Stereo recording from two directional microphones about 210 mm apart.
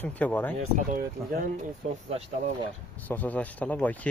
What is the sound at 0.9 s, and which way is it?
Speech, 40° right (ahead or behind).